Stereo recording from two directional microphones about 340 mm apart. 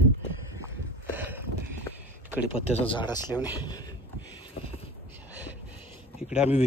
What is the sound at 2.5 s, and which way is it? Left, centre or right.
Speech, centre.